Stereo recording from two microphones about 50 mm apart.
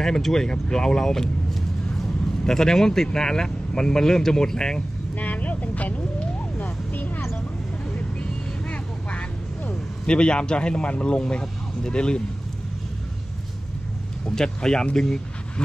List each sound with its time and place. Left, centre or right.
0.0 s speech: centre
2.4 s speech: centre
5.2 s vehicle: left
7.9 s vehicle: left
10.0 s speech: centre
14.3 s speech: centre